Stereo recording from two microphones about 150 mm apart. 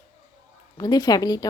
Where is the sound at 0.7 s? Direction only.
25° left (ahead or behind).